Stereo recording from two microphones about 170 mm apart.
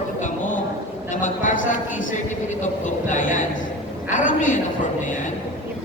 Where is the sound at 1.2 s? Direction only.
50° left (ahead or behind).